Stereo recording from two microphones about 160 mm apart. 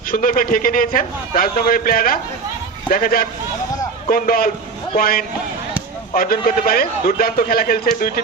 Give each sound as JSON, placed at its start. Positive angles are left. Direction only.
{"t": 0.1, "sound": "a man's voice", "side_deg": 60}